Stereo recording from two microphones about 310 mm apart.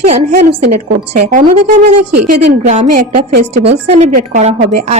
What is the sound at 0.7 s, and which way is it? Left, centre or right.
Speech, right.